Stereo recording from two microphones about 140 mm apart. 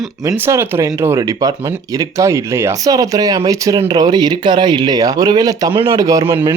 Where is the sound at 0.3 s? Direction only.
20° right (ahead or behind).